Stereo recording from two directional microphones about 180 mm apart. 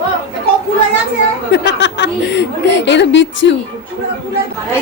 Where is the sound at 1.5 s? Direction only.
75° left (ahead or behind).